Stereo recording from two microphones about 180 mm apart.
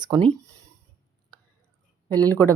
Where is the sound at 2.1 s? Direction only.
20° right (ahead or behind).